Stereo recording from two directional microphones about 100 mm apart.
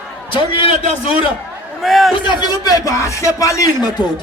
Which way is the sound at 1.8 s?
Centre (ahead or behind).